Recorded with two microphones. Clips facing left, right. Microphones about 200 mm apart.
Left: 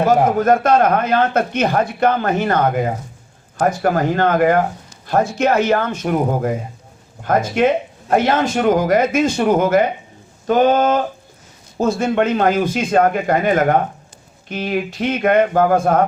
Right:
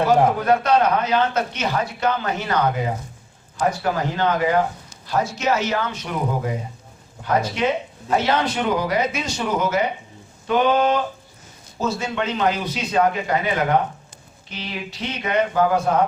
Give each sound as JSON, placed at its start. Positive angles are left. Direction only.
{"t": 0.3, "sound": "speech", "side_deg": 45}